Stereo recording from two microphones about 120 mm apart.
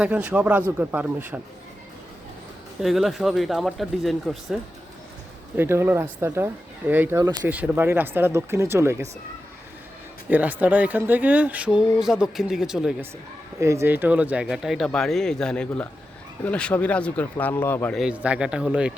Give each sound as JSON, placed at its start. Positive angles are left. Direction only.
{"t": 0.0, "sound": "speech", "side_deg": -10}
{"t": 2.8, "sound": "speech", "side_deg": 0}
{"t": 5.5, "sound": "speech", "side_deg": -20}
{"t": 10.2, "sound": "speech", "side_deg": -15}
{"t": 13.6, "sound": "speech", "side_deg": -25}
{"t": 17.9, "sound": "speech", "side_deg": -5}